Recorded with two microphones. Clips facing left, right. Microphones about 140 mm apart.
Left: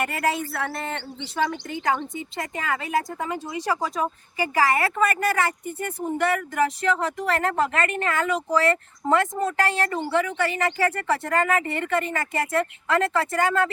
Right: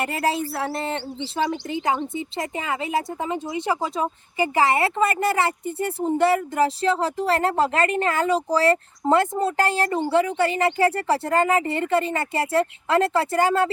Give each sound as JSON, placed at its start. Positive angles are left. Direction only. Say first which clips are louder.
{"t": 0.0, "sound": "speech", "louder": "right 1 dB", "side_deg": -30}